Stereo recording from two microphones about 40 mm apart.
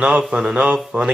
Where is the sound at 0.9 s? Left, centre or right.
Right.